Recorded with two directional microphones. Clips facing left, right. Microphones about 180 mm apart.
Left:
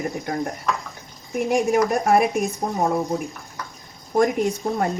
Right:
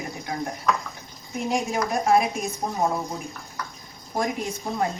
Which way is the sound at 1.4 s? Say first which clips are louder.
Left 6 dB; 60° left (ahead or behind).